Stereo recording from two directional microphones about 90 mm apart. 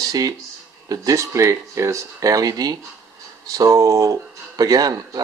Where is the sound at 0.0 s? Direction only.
45° right (ahead or behind).